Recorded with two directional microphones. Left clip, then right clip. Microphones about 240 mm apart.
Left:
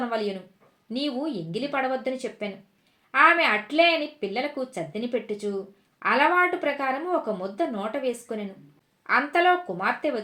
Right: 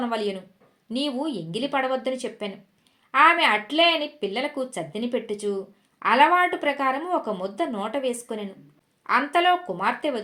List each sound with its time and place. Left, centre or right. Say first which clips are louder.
0.9 s a woman's voice: right 2 dB; right